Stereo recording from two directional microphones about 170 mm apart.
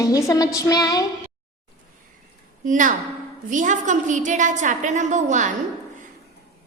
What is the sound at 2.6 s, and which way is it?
A woman's voice, 50° right (ahead or behind).